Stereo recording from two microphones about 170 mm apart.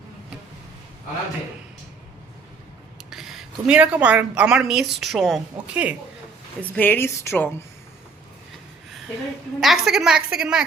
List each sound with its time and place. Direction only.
3.1 s a woman's voice: centre (ahead or behind)
6.6 s a woman's voice: 10° left (ahead or behind)
9.6 s a woman's voice: centre (ahead or behind)